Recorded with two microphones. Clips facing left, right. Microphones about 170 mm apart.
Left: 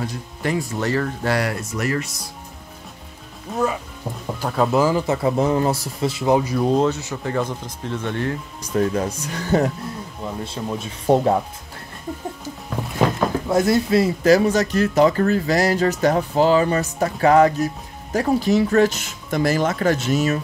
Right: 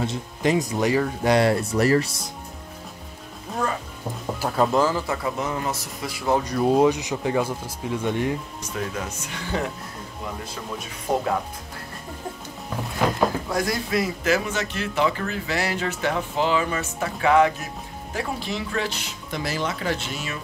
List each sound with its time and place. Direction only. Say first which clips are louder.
0.0 s speech: right 2 dB; 20° right (ahead or behind)
3.5 s speech: left 4 dB; centre (ahead or behind)
4.8 s speech: left 5 dB; 20° left (ahead or behind)
6.4 s speech: left 2 dB; 5° left (ahead or behind)
6.7 s speech: right 3 dB; 15° right (ahead or behind)
8.7 s speech: left 10 dB; 40° left (ahead or behind)
10.4 s speech: left 6 dB; 25° left (ahead or behind)
13.5 s speech: left 8 dB; 25° left (ahead or behind); by 20.3 s 45° left (ahead or behind)